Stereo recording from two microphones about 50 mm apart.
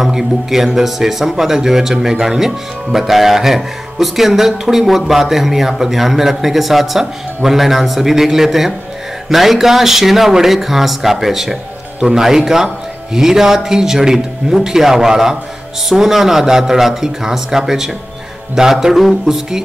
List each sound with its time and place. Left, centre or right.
0.0 s speech: centre